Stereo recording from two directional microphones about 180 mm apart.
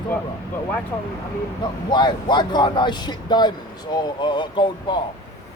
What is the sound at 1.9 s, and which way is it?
Speech, 25° left (ahead or behind).